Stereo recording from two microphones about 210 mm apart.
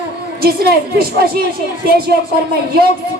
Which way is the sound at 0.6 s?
45° right (ahead or behind).